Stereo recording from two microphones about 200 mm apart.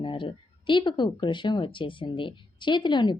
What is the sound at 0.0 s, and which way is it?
Speech, 25° left (ahead or behind).